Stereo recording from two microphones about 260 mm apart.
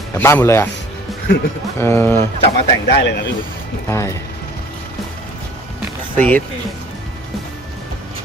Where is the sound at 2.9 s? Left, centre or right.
Left.